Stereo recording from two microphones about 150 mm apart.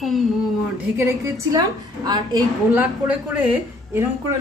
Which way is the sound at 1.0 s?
20° right (ahead or behind).